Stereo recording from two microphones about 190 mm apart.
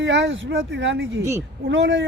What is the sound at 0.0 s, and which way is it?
Speech, 75° right (ahead or behind).